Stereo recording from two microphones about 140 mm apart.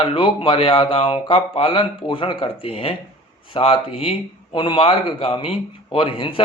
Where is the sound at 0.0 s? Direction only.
35° left (ahead or behind).